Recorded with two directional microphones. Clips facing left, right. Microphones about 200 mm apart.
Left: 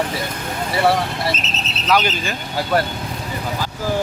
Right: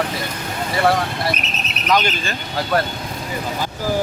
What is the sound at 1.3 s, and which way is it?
Speech, 15° right (ahead or behind).